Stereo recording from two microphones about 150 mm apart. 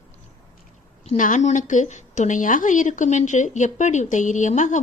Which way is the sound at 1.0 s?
55° left (ahead or behind).